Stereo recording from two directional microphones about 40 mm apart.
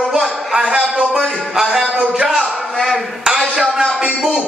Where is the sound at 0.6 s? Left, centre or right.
Right.